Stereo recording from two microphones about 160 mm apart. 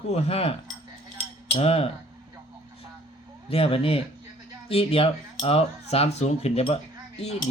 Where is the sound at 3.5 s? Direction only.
35° left (ahead or behind).